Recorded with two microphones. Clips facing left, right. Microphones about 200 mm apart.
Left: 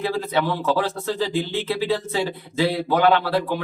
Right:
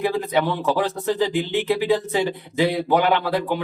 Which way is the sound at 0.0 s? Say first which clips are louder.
Right 2 dB; 15° right (ahead or behind).